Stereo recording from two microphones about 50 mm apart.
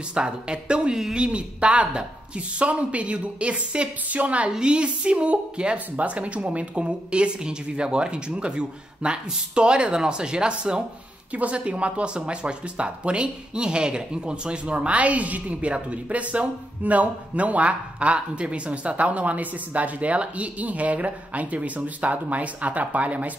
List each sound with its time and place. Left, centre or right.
0.1 s speech: centre
4.5 s speech: centre